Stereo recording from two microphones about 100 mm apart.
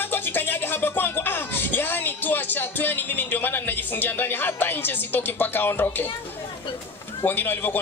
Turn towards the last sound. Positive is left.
turn(degrees=20)  # may be behind; listen again after turning